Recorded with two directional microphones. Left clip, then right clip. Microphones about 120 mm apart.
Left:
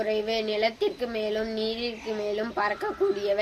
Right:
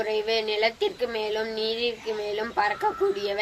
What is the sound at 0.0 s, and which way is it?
Speech, 35° left (ahead or behind).